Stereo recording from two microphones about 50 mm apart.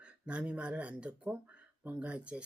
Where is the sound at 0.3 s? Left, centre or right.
Right.